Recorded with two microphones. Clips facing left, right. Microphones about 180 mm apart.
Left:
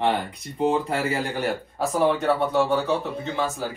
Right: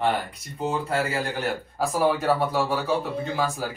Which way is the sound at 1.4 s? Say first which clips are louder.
Left 1 dB; centre (ahead or behind).